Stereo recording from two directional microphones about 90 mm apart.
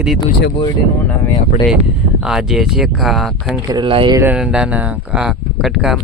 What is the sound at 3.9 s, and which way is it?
Speech, 80° right.